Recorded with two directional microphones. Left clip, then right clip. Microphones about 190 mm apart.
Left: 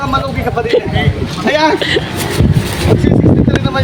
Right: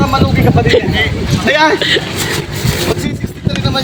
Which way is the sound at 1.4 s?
50° left (ahead or behind).